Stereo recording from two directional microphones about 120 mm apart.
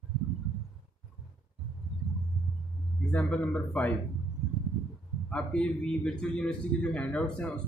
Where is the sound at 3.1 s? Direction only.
10° left (ahead or behind).